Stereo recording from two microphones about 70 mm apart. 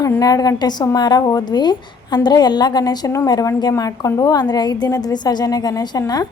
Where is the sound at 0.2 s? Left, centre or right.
Left.